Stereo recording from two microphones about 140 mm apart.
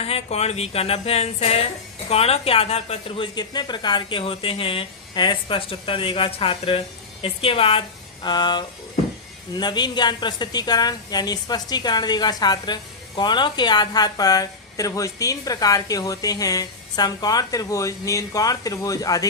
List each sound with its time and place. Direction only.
0.0 s speech: 50° left (ahead or behind)
3.3 s speech: 30° left (ahead or behind)
8.2 s a woman's voice: 30° left (ahead or behind)